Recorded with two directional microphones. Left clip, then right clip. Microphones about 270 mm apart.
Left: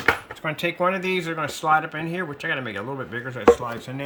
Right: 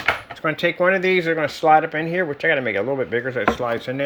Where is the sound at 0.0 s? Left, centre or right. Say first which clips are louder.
Right 1 dB; centre.